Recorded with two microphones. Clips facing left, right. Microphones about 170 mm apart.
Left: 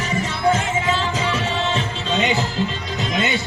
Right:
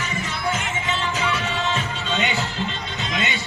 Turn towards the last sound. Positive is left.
turn(degrees=40)  # may be behind; listen again after turning